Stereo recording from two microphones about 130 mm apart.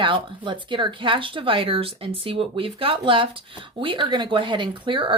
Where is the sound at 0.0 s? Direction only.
40° right (ahead or behind).